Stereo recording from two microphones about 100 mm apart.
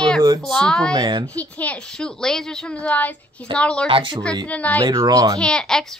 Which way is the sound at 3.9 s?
60° right (ahead or behind).